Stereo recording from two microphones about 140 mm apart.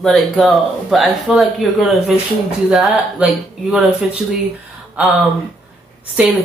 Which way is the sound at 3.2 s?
5° right (ahead or behind).